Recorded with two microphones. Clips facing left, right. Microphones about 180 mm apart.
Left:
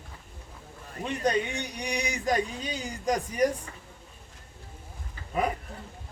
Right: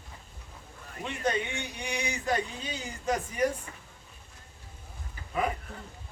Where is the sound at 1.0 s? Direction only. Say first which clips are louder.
Left 3 dB; 40° left (ahead or behind).